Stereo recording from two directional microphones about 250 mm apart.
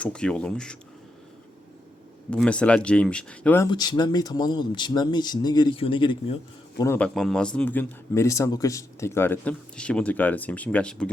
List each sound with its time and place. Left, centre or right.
0.0 s speech: centre
2.3 s speech: centre